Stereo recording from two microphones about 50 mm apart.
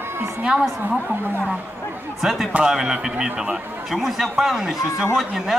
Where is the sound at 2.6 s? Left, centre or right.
Centre.